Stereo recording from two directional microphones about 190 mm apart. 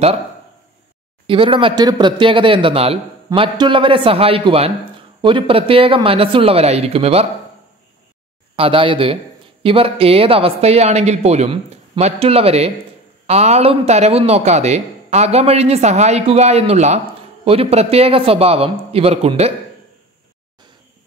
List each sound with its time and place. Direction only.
1.2 s speech: 25° right (ahead or behind)
8.5 s speech: 30° right (ahead or behind)